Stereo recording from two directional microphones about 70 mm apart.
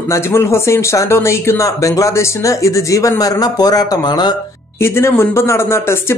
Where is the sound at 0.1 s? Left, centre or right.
Left.